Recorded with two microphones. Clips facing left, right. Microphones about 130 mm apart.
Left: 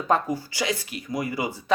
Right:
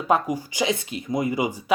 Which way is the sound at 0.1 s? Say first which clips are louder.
Right 2 dB; 15° right (ahead or behind).